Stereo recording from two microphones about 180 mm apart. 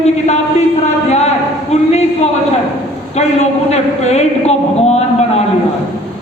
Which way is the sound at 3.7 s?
35° left (ahead or behind).